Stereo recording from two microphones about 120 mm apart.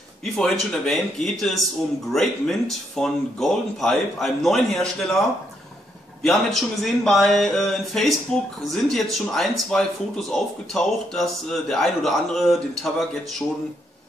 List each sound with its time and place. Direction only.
0.2 s speech: 5° left (ahead or behind)
3.0 s speech: 5° left (ahead or behind)
6.2 s speech: centre (ahead or behind)